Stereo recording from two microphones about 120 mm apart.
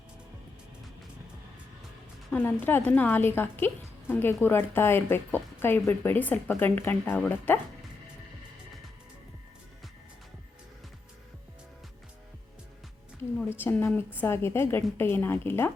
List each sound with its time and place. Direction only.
2.3 s a woman's voice: 15° left (ahead or behind)
13.6 s a woman's voice: 20° left (ahead or behind)